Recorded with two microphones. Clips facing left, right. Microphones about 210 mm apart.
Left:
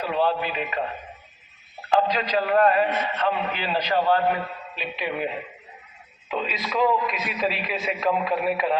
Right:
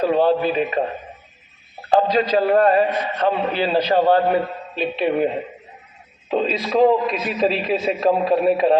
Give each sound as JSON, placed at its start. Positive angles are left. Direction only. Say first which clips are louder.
{"t": 0.0, "sound": "a man's voice", "louder": "right 7 dB", "side_deg": -40}